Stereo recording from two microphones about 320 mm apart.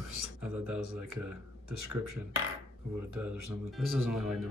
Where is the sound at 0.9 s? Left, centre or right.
Right.